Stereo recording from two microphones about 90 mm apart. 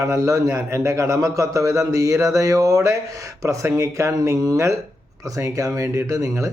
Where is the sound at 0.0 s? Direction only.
35° right (ahead or behind).